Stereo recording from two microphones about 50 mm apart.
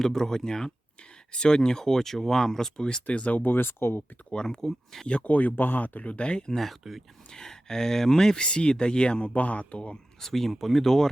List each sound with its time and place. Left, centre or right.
0.0 s speech: centre; by 4.0 s left
4.3 s speech: centre
5.0 s speech: left
6.6 s speech: centre
7.3 s speech: centre
10.2 s speech: centre